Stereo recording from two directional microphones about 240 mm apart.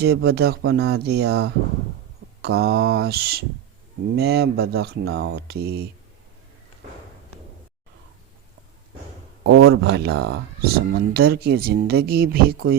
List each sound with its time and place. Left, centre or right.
0.0 s speech: right
9.4 s speech: right